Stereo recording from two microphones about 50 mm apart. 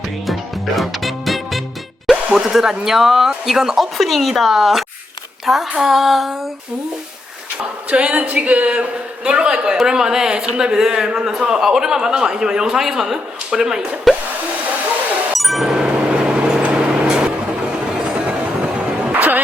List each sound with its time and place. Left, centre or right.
0.3 s music: centre
2.0 s speech: centre
7.9 s a man's voice: right
15.3 s a sound: centre
15.8 s vehicle: right
19.1 s music: right